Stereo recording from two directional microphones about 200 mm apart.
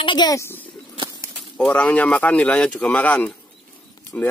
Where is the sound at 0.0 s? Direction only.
20° left (ahead or behind).